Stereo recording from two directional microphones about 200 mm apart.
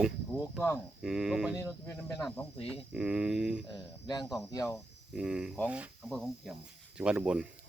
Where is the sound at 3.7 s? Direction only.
20° left (ahead or behind).